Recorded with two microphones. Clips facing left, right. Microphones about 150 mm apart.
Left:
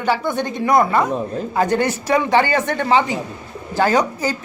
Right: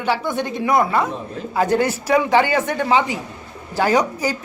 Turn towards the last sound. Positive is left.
turn(degrees=-10)  # may be behind; listen again after turning